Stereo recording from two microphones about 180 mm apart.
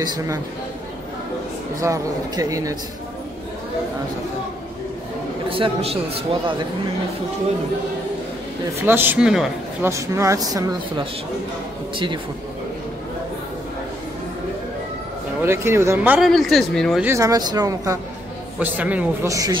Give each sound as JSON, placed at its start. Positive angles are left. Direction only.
{"t": 0.0, "sound": "speech", "side_deg": -20}
{"t": 1.8, "sound": "speech", "side_deg": -20}
{"t": 5.5, "sound": "a man's voice", "side_deg": -30}
{"t": 8.8, "sound": "speech", "side_deg": -10}
{"t": 9.8, "sound": "speech", "side_deg": -15}
{"t": 15.4, "sound": "speech", "side_deg": -15}
{"t": 16.3, "sound": "speech", "side_deg": 0}
{"t": 17.0, "sound": "speech", "side_deg": -15}
{"t": 18.6, "sound": "speech", "side_deg": -10}